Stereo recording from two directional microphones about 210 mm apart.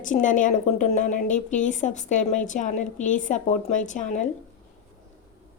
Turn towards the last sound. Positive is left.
turn(degrees=35)  # may be behind; listen again after turning